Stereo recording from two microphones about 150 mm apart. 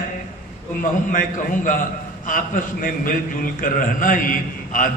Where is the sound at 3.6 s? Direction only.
65° left (ahead or behind).